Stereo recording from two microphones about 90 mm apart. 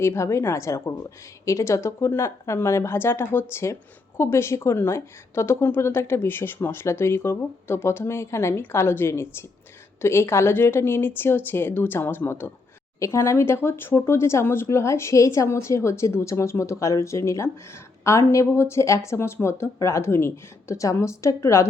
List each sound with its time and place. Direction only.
0.0 s a woman's voice: 30° left (ahead or behind)